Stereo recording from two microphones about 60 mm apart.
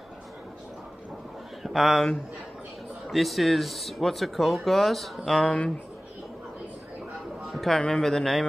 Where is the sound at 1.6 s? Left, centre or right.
Centre.